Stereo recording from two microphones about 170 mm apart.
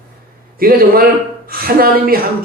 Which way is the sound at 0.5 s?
60° right (ahead or behind).